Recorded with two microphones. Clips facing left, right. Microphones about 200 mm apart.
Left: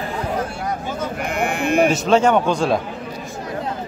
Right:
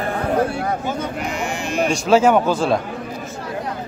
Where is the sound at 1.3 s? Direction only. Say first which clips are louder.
Left 7 dB; 55° left (ahead or behind).